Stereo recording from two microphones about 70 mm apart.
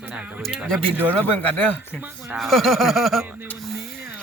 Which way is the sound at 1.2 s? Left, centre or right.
Left.